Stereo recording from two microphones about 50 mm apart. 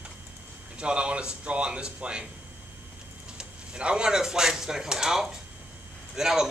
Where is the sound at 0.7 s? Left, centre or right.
Right.